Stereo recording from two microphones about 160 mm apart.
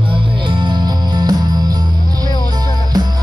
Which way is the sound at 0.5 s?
30° right (ahead or behind).